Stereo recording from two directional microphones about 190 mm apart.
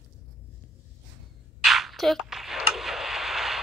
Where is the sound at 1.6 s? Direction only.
Centre (ahead or behind).